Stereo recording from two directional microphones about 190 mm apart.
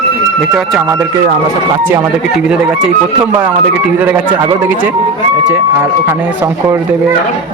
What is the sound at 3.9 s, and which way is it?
Speech, 10° right (ahead or behind).